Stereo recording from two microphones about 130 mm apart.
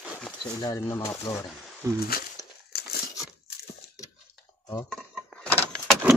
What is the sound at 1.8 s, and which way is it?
Speech, 25° right (ahead or behind).